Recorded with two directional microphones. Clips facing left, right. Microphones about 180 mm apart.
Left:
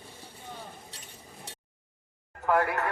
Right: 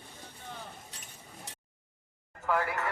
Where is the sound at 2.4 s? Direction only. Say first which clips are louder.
Left 5 dB; 60° left (ahead or behind).